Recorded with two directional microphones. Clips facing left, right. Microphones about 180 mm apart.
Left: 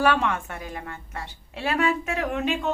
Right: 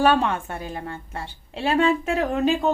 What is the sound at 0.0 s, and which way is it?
A woman's voice, 30° right (ahead or behind).